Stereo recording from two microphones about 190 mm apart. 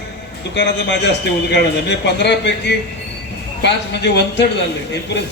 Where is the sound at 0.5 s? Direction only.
65° left (ahead or behind).